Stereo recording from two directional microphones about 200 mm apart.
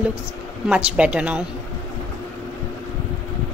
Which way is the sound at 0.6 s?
5° right (ahead or behind).